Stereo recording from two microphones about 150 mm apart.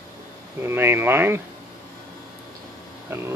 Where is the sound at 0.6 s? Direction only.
15° right (ahead or behind).